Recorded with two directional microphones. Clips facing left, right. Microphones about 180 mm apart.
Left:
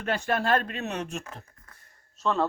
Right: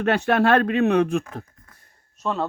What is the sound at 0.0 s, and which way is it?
Speech, 70° right (ahead or behind).